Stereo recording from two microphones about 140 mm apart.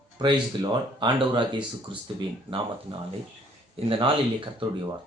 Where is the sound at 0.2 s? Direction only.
35° right (ahead or behind).